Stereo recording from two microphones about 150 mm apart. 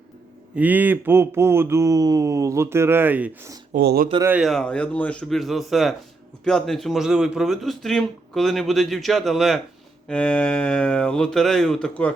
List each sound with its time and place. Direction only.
0.5 s a sound: 10° right (ahead or behind)
3.8 s speech: 85° right
4.4 s a man's voice: centre (ahead or behind)